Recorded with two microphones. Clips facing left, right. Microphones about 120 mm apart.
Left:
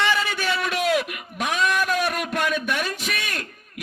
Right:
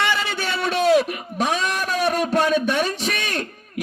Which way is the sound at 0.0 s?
25° right (ahead or behind).